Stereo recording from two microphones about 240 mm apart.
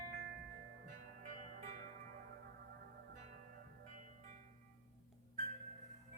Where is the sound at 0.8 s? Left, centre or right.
Right.